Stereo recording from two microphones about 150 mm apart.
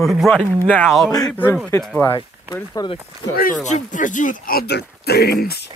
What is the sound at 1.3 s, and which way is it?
Speech, 15° left (ahead or behind).